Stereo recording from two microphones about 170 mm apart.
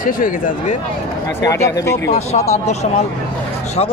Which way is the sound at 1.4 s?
20° left (ahead or behind).